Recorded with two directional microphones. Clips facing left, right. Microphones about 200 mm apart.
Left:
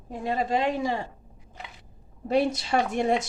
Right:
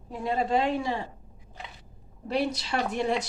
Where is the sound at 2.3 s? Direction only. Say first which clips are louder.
Left 4 dB; 45° left (ahead or behind).